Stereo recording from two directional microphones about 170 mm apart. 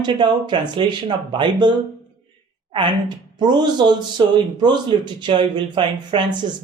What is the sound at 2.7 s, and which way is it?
Speech, 25° right (ahead or behind).